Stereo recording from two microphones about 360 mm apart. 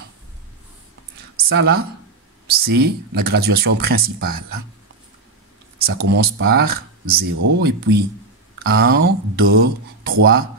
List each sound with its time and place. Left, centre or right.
1.5 s speech: right
2.4 s a sound: right
3.2 s speech: right
5.9 s speech: right